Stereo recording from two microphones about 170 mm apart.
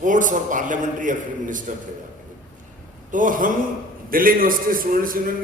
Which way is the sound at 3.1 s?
50° right (ahead or behind).